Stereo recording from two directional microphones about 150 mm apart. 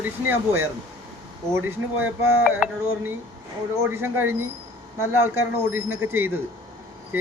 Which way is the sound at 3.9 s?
15° right (ahead or behind).